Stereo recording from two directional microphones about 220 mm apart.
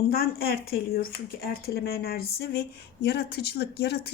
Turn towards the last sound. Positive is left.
turn(degrees=50)  # may be behind; listen again after turning